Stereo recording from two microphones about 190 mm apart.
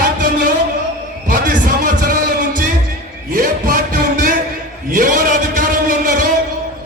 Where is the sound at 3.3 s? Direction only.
45° right (ahead or behind).